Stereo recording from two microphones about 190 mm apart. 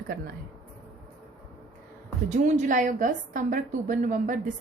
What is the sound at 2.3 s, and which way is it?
A woman's voice, 40° right (ahead or behind).